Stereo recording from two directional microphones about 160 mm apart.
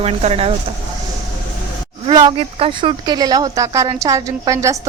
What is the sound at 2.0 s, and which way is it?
A woman's voice, 30° right (ahead or behind).